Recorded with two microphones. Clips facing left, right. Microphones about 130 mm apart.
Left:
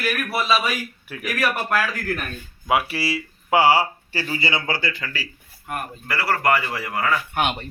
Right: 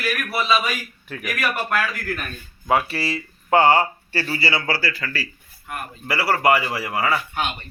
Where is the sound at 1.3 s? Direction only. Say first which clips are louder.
Left 1 dB; 30° left (ahead or behind).